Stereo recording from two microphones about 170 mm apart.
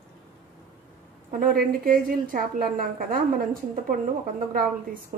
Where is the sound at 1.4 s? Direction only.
55° right (ahead or behind).